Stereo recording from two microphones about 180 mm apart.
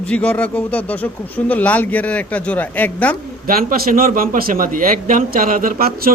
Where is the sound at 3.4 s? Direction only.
55° right (ahead or behind).